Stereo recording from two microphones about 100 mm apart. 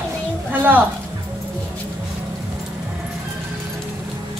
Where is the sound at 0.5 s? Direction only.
20° right (ahead or behind).